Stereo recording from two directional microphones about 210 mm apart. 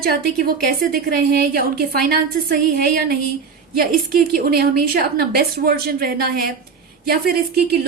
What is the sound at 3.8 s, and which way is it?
A woman's voice, 45° right (ahead or behind).